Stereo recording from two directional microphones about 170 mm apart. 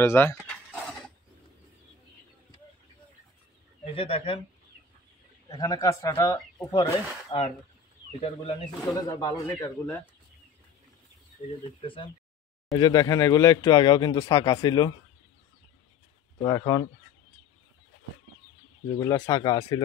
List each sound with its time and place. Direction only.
0.0 s speech: 15° left (ahead or behind)
0.5 s a sound: 5° left (ahead or behind)
3.8 s speech: 35° left (ahead or behind)
5.6 s speech: 20° left (ahead or behind)
8.2 s speech: 35° left (ahead or behind)
9.1 s speech: 15° left (ahead or behind)
11.8 s speech: 30° left (ahead or behind)
16.3 s speech: 20° left (ahead or behind)
18.9 s speech: 20° left (ahead or behind)